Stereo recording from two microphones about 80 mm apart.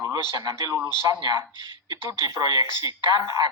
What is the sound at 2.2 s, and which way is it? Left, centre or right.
Speech, right.